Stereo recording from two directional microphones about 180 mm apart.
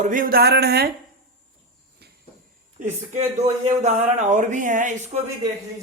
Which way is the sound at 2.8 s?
35° right (ahead or behind).